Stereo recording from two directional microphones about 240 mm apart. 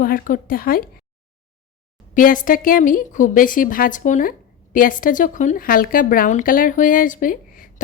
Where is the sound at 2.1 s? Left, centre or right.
Left.